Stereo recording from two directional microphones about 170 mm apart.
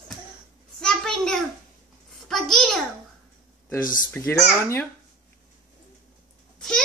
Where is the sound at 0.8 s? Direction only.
5° left (ahead or behind).